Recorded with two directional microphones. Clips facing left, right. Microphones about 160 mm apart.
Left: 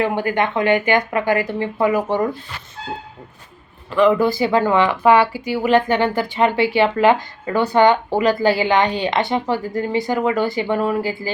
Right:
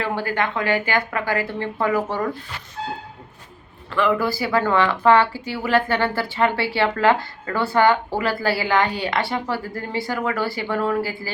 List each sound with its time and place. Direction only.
0.0 s speech: 20° left (ahead or behind)
3.9 s speech: 20° left (ahead or behind)